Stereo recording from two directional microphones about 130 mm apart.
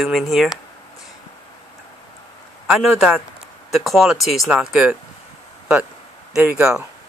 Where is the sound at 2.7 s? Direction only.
Centre (ahead or behind).